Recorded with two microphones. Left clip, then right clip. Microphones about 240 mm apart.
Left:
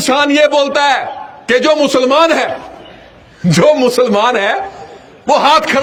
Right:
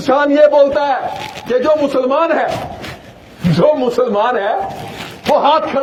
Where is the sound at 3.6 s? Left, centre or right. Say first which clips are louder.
Left 3 dB; left.